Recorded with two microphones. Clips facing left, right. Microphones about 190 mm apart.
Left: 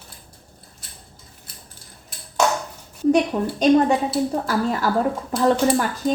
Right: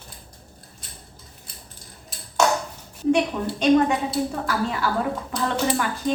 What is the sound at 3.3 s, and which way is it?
Speech, 25° left (ahead or behind).